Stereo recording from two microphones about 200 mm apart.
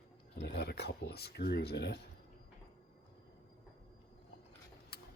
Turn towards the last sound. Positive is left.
turn(degrees=50)  # may be behind; listen again after turning